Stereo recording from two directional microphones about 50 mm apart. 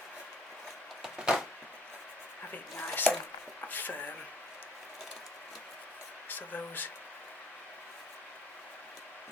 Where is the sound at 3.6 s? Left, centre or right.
Left.